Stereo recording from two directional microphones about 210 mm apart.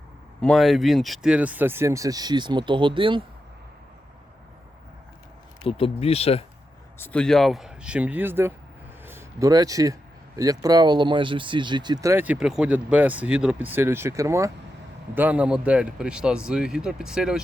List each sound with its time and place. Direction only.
0.4 s speech: centre (ahead or behind); by 3.2 s 25° right (ahead or behind)
5.6 s speech: 25° left (ahead or behind)
7.0 s speech: 5° left (ahead or behind)